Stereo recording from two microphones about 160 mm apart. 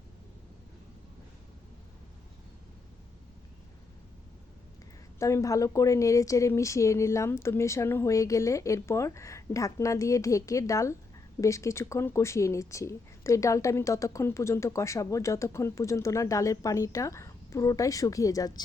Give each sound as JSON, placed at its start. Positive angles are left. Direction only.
{"t": 5.2, "sound": "speech", "side_deg": 20}